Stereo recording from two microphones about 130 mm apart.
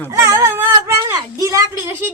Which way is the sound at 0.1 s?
20° right (ahead or behind).